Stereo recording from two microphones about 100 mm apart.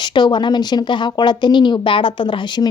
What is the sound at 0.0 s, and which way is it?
Speech, 50° left (ahead or behind).